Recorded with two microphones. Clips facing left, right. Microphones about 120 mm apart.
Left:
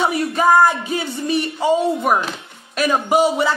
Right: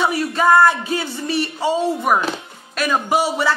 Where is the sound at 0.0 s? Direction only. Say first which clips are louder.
Left 1 dB; 20° left (ahead or behind).